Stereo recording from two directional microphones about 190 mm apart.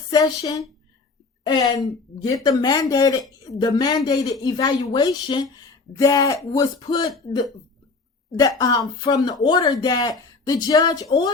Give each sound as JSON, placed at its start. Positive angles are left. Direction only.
{"t": 0.1, "sound": "a woman's voice", "side_deg": 20}
{"t": 2.1, "sound": "speech", "side_deg": 20}
{"t": 8.4, "sound": "speech", "side_deg": 20}